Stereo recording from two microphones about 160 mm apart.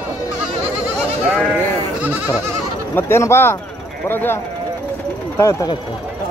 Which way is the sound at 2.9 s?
15° left (ahead or behind).